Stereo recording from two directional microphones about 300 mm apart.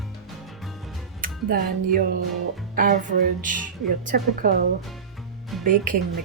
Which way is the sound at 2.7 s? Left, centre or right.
Right.